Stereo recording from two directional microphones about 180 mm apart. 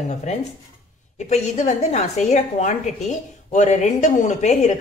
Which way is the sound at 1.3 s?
40° left (ahead or behind).